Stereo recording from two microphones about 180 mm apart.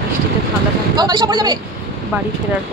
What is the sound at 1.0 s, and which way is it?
Speech, 25° right (ahead or behind).